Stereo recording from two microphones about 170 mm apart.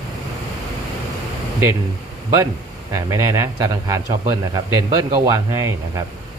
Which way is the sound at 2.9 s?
15° right (ahead or behind).